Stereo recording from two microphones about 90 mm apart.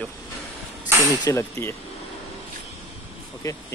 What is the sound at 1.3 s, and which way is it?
Speech, 30° left (ahead or behind).